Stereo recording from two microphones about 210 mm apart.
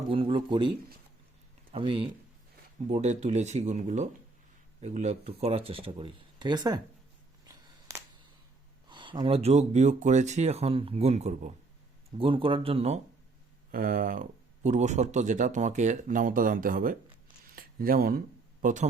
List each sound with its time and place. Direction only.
0.1 s speech: 25° right (ahead or behind)
7.4 s a sound: 15° right (ahead or behind)
8.9 s speech: 20° right (ahead or behind)
13.7 s speech: 40° right (ahead or behind)
17.4 s a sound: 45° right (ahead or behind)
18.6 s speech: 35° right (ahead or behind)